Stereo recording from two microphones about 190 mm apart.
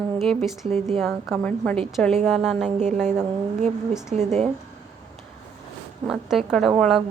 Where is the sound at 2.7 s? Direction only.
35° right (ahead or behind).